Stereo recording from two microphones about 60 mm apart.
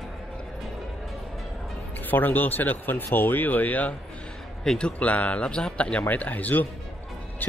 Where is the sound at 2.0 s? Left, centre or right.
Left.